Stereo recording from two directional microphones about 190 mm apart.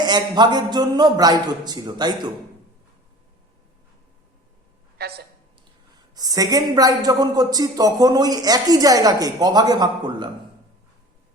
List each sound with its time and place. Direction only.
0.0 s speech: 20° right (ahead or behind)
4.9 s a man's voice: 55° right (ahead or behind)
6.1 s speech: 20° right (ahead or behind)